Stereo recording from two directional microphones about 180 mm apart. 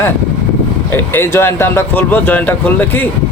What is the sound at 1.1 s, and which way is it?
Speech, 15° left (ahead or behind).